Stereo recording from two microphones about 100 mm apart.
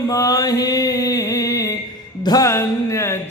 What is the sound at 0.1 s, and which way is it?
Mantra, 35° left (ahead or behind).